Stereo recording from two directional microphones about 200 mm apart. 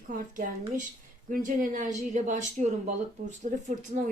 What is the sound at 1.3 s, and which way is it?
A woman's voice, 40° right (ahead or behind).